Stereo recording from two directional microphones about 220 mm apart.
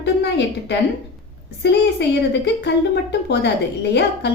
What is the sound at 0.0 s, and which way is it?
A woman's voice, 50° left (ahead or behind).